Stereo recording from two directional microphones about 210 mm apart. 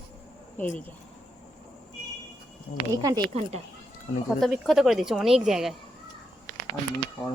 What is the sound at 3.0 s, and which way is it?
Speech, 20° right (ahead or behind).